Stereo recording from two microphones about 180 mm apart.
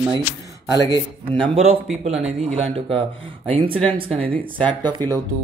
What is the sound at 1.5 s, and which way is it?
Speech, 35° right (ahead or behind).